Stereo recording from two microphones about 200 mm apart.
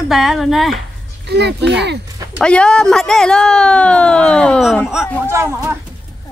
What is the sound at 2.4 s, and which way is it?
Speech, 5° left (ahead or behind).